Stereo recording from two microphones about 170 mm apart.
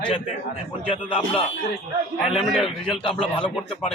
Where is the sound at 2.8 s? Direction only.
30° left (ahead or behind).